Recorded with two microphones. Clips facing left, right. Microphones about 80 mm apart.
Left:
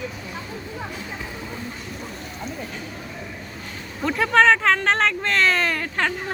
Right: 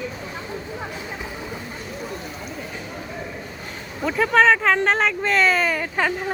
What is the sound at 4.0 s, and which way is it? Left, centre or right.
Speech, centre.